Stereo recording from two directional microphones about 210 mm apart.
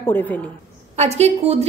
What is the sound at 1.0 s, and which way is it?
Speech, 30° right (ahead or behind).